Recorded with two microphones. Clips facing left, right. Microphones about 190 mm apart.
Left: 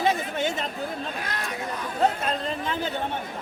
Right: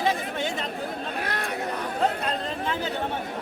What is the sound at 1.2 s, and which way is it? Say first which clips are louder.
Speech: right 3 dB; 60° right (ahead or behind).